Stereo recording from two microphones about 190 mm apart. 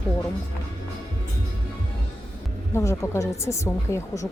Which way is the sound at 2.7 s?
15° left (ahead or behind).